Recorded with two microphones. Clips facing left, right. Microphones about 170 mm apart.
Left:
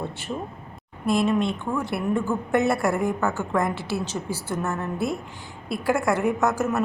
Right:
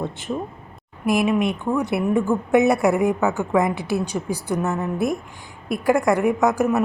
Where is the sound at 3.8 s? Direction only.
15° right (ahead or behind).